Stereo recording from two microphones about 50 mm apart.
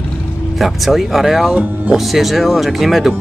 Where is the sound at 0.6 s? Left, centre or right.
Centre.